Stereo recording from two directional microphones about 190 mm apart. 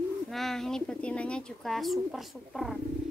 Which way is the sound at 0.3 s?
Centre (ahead or behind).